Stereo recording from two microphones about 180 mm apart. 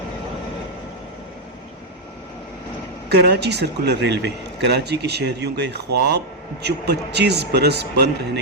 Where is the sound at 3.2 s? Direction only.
65° right (ahead or behind).